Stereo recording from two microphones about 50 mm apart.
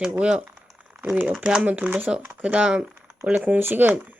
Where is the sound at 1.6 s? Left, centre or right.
Right.